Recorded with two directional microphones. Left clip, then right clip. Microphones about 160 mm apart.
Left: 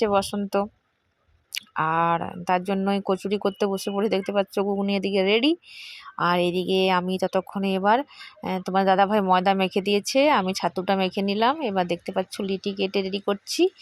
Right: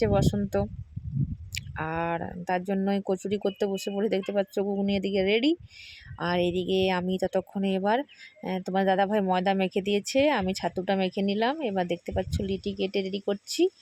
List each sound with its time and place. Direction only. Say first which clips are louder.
0.0 s speech: left 3 dB; 10° right (ahead or behind)
1.5 s speech: left 8 dB; 10° right (ahead or behind)